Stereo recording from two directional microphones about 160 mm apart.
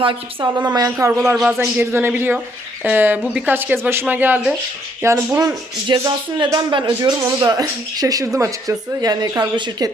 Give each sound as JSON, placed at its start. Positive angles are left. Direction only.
{"t": 0.7, "sound": "speech", "side_deg": -20}
{"t": 5.9, "sound": "speech", "side_deg": -25}